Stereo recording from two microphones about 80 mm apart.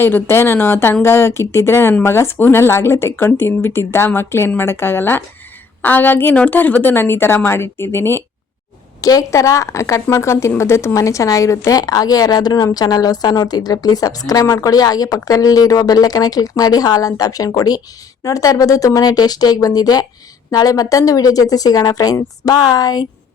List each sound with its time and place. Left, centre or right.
0.0 s a woman's voice: left
9.0 s speech: left
11.8 s a woman's voice: left